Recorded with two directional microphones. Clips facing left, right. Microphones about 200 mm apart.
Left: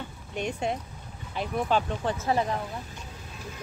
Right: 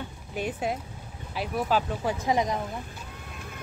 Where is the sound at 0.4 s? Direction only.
5° right (ahead or behind).